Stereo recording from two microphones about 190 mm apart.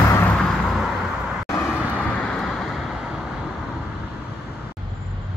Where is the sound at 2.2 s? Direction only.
5° left (ahead or behind).